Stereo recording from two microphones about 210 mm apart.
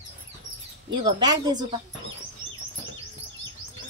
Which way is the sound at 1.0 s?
20° right (ahead or behind).